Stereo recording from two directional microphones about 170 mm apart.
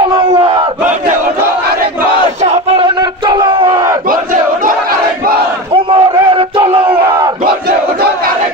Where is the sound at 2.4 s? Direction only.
40° right (ahead or behind).